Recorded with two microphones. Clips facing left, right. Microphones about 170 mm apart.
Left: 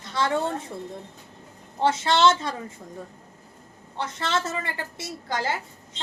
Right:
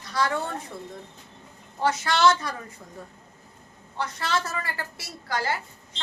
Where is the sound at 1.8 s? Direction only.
25° left (ahead or behind).